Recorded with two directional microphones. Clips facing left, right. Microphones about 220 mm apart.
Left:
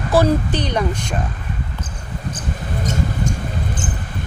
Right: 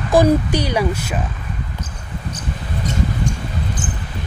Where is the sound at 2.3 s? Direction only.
50° left (ahead or behind).